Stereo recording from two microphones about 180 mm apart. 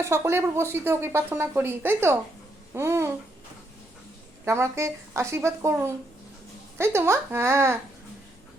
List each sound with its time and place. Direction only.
0.0 s a woman's voice: 15° right (ahead or behind)
4.4 s a woman's voice: 15° right (ahead or behind)